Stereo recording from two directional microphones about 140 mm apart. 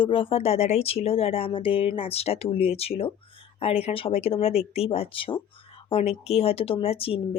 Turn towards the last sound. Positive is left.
turn(degrees=45)  # may be behind; listen again after turning